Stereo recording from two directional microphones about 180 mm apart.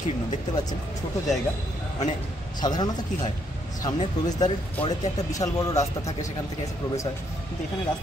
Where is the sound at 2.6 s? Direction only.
25° left (ahead or behind).